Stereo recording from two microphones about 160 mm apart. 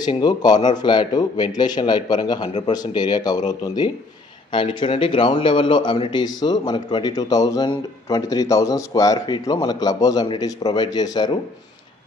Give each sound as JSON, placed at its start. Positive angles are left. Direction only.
{"t": 0.0, "sound": "a man's voice", "side_deg": 25}